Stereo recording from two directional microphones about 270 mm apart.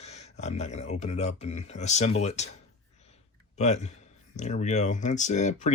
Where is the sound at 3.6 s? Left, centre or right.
Left.